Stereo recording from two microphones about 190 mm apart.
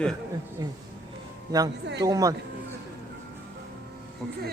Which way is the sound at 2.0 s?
20° right (ahead or behind).